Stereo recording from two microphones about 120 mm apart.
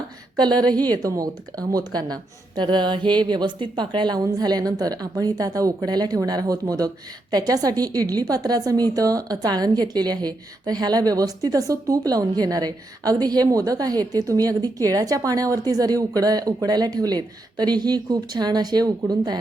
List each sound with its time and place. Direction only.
0.3 s a woman's voice: 35° right (ahead or behind)